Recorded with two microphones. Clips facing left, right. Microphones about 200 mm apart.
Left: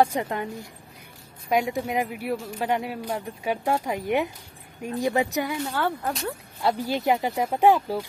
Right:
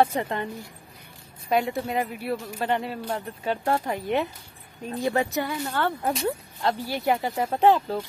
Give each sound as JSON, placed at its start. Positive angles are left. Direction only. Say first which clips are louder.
{"t": 0.0, "sound": "speech", "louder": "even", "side_deg": 10}
{"t": 1.5, "sound": "speech", "louder": "even", "side_deg": 15}